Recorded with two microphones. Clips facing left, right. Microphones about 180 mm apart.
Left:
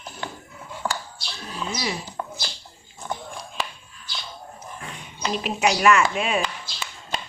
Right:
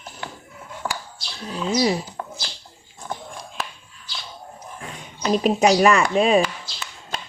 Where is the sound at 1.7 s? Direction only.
35° right (ahead or behind).